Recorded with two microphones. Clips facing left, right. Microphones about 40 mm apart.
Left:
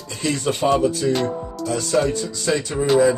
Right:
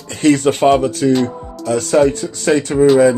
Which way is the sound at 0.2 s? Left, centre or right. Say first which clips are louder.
Right 9 dB; right.